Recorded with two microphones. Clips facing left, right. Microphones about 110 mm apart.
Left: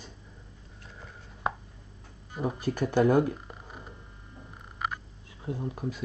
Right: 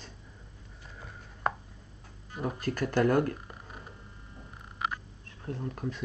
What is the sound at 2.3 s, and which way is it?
Speech, 5° left (ahead or behind).